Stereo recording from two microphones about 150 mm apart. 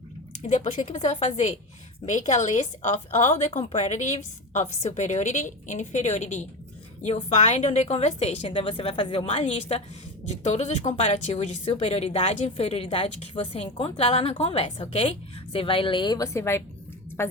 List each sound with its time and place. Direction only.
0.4 s speech: 50° left (ahead or behind)
0.9 s speech: 40° left (ahead or behind)
2.0 s a woman's voice: 55° left (ahead or behind); by 17.3 s 15° left (ahead or behind)